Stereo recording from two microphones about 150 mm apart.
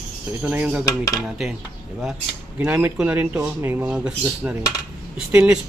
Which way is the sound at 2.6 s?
10° right (ahead or behind).